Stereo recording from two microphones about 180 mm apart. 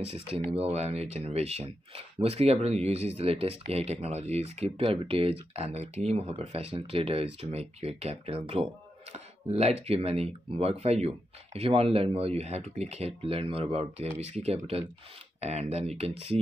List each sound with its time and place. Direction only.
0.0 s speech: 35° right (ahead or behind)